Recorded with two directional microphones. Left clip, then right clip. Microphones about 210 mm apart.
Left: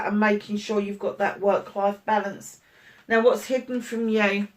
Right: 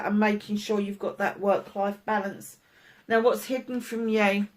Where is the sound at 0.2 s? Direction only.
45° right (ahead or behind).